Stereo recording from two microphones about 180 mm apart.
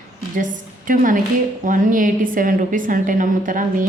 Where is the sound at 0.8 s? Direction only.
50° right (ahead or behind).